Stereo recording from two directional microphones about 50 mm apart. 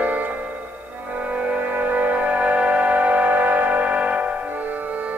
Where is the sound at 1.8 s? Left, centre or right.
Right.